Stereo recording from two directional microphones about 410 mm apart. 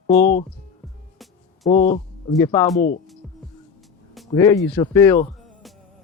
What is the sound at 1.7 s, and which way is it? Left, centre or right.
Speech, centre.